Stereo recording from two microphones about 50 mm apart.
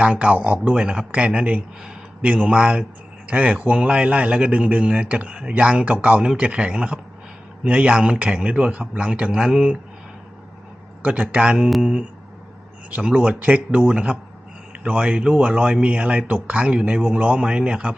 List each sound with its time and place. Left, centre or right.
0.0 s a man's voice: right
0.7 s a man's voice: centre
9.3 s speech: centre
11.0 s a man's voice: right
11.8 s a man's voice: centre
17.4 s a man's voice: centre